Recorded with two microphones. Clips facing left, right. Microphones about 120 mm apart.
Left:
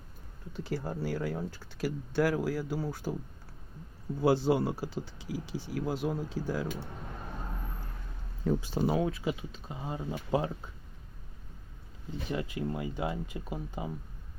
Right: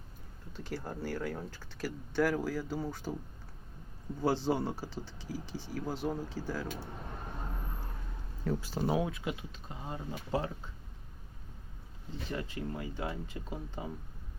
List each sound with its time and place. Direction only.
0.5 s speech: 10° left (ahead or behind)
4.2 s speech: 10° left (ahead or behind)
8.4 s speech: 15° left (ahead or behind)
8.9 s speech: 5° right (ahead or behind); by 10.5 s 15° left (ahead or behind)
12.3 s speech: 10° left (ahead or behind)